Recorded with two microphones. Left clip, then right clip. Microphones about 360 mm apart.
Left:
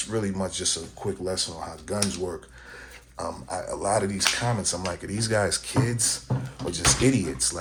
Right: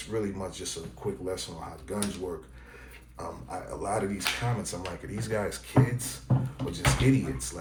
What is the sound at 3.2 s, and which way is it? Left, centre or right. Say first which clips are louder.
Speech: left 6 dB; left.